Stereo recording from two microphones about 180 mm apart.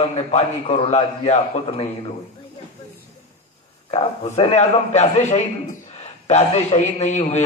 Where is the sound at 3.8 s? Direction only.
30° left (ahead or behind).